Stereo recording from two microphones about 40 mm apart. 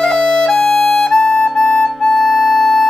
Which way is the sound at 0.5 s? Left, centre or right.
Centre.